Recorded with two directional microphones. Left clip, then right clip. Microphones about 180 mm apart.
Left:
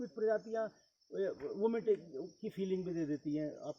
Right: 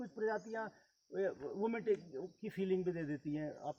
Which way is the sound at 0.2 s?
25° right (ahead or behind).